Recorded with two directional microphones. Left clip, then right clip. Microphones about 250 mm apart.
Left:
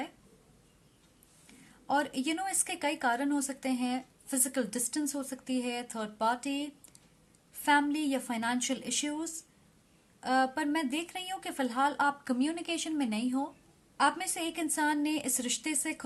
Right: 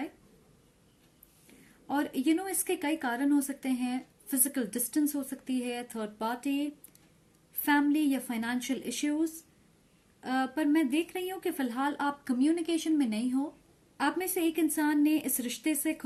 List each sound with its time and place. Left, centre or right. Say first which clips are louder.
1.9 s a woman's voice: right 1 dB; left
8.3 s a woman's voice: left 1 dB; left